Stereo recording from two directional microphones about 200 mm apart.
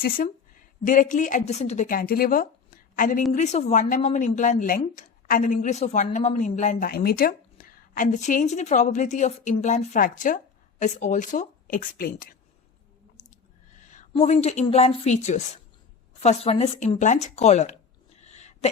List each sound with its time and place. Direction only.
0.0 s speech: 45° left (ahead or behind)
14.1 s speech: 30° left (ahead or behind)
18.2 s a sound: 35° left (ahead or behind)